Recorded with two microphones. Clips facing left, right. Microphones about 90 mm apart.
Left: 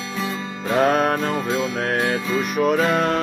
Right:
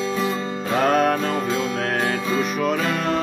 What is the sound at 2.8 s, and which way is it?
Music, 35° left (ahead or behind).